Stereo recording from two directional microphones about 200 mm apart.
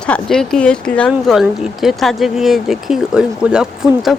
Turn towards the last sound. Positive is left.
turn(degrees=0)  # may be behind; listen again after turning